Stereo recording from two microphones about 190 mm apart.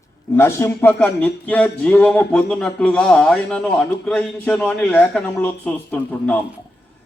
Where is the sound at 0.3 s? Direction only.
15° left (ahead or behind).